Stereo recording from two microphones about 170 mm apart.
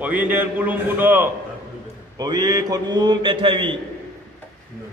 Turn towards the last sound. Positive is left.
turn(degrees=-30)  # may be behind; listen again after turning